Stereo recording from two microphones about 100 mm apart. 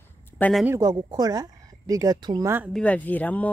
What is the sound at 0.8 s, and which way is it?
Speech, 40° right (ahead or behind).